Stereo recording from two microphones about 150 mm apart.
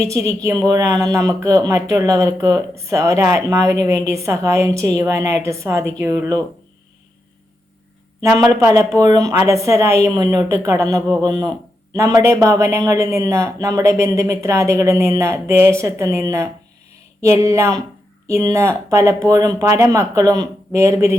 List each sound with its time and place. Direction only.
0.0 s speech: 20° right (ahead or behind)
8.2 s speech: 15° right (ahead or behind)